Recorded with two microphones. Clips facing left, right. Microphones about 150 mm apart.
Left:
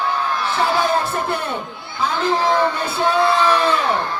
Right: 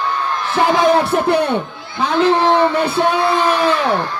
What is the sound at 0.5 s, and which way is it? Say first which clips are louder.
Music: right 7 dB; 85° right.